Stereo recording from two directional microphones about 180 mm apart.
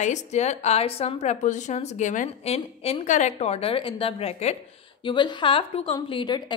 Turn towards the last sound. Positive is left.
turn(degrees=25)  # may be behind; listen again after turning